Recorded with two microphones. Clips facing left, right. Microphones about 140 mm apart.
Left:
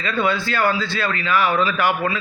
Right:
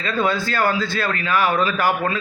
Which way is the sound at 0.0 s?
40° right (ahead or behind).